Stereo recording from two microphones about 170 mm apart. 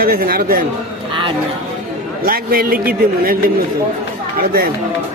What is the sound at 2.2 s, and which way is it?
Speech, 60° right (ahead or behind).